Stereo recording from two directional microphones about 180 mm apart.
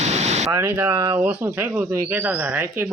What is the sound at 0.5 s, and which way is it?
Speech, 15° right (ahead or behind).